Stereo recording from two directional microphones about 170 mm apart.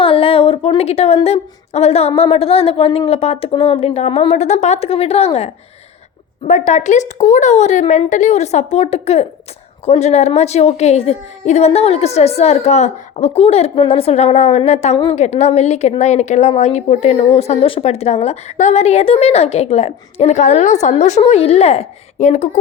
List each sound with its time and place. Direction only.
0.0 s a woman's voice: 35° left (ahead or behind)